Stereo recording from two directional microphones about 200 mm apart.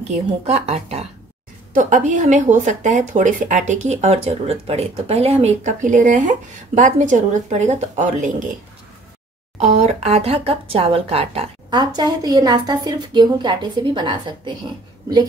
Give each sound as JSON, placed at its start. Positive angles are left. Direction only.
{"t": 0.5, "sound": "speech", "side_deg": -30}
{"t": 9.6, "sound": "speech", "side_deg": -30}